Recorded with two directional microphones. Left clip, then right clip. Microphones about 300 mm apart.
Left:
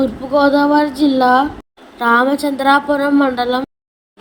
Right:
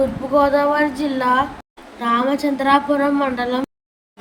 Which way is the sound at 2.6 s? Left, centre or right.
Centre.